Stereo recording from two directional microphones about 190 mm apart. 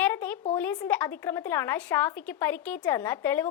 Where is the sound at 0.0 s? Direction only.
10° left (ahead or behind).